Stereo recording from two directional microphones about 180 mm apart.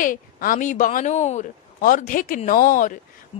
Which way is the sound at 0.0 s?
50° left (ahead or behind).